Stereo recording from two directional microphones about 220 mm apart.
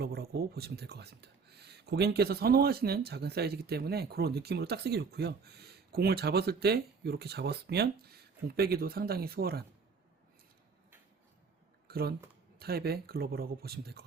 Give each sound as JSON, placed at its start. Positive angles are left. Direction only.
{"t": 0.0, "sound": "speech", "side_deg": -45}
{"t": 11.9, "sound": "speech", "side_deg": -45}